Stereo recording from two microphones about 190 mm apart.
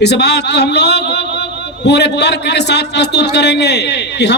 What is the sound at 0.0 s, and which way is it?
A man's voice, 60° left (ahead or behind).